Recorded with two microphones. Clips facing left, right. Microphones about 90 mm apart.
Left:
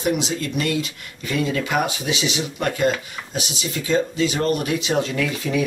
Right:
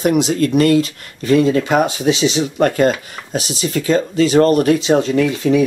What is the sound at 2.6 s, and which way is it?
Speech, 50° right (ahead or behind).